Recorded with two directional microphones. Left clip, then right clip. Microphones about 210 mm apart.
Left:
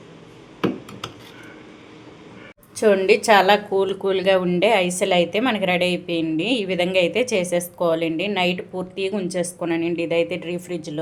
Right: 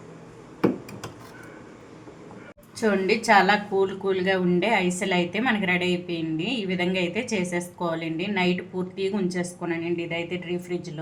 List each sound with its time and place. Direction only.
2.8 s a woman's voice: 40° left (ahead or behind)